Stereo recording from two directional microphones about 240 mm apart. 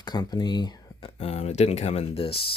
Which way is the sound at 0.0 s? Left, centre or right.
Centre.